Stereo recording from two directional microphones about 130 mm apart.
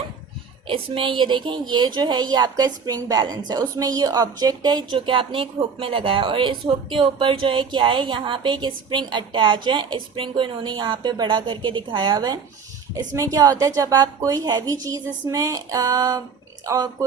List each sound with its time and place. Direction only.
0.7 s a woman's voice: 40° right (ahead or behind)